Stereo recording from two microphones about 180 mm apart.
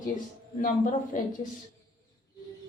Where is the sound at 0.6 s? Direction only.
45° left (ahead or behind).